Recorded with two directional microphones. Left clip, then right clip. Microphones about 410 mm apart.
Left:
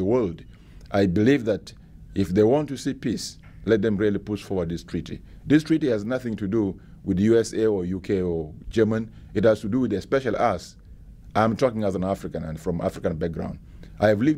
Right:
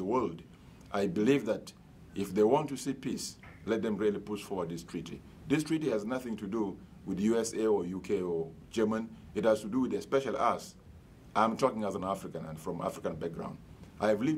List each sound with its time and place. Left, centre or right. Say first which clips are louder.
0.0 s speech: left 9 dB; left